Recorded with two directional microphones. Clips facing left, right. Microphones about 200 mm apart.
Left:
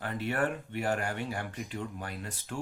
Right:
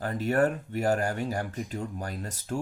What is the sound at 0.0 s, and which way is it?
Speech, 40° right (ahead or behind).